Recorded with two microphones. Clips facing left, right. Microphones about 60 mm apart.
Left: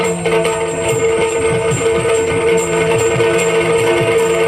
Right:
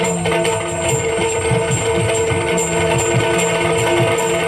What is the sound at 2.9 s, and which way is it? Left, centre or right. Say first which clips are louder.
Music: left 4 dB; centre.